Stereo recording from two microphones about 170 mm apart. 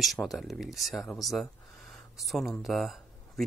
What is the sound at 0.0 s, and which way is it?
Speech, centre (ahead or behind).